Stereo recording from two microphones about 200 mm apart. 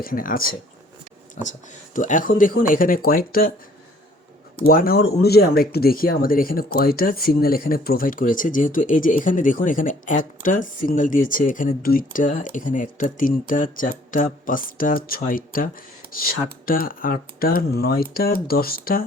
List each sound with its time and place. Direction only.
0.0 s speech: 45° left (ahead or behind)
4.6 s speech: 45° left (ahead or behind)